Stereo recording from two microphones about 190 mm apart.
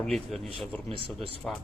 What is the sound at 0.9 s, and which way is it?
Speech, 30° right (ahead or behind).